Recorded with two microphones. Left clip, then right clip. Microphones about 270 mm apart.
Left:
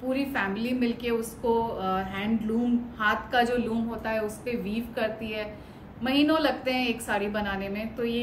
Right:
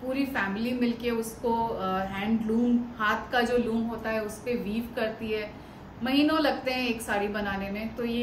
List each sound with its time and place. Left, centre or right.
0.1 s a woman's voice: centre